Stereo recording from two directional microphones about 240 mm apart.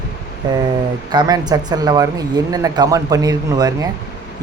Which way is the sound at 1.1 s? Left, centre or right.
Centre.